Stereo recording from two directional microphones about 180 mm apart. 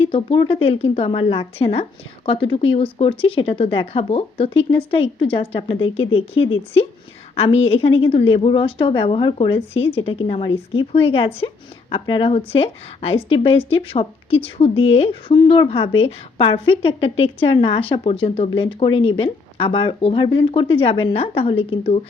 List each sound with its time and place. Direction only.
0.0 s a woman's voice: 30° left (ahead or behind)